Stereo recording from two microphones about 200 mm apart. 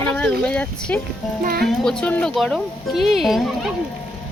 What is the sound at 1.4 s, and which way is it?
Speech, 50° right (ahead or behind).